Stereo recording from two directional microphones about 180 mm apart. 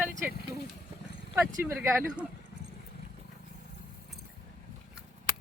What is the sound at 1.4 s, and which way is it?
Speech, 15° right (ahead or behind).